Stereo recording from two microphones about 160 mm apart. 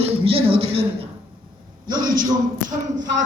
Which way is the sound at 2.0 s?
55° right (ahead or behind).